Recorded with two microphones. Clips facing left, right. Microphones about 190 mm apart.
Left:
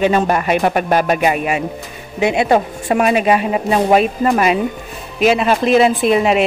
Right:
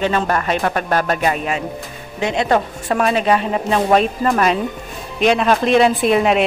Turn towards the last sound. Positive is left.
turn(degrees=0)  # may be behind; listen again after turning